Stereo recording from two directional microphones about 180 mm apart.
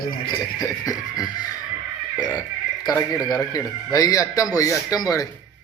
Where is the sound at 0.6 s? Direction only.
20° left (ahead or behind).